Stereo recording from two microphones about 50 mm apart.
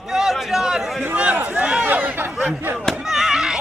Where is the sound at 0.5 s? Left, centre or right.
Centre.